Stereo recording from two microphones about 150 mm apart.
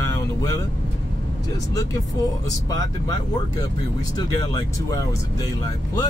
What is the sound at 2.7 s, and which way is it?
Speech, 25° left (ahead or behind).